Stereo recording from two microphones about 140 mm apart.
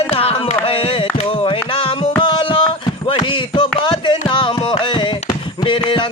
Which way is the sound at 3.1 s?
35° left (ahead or behind).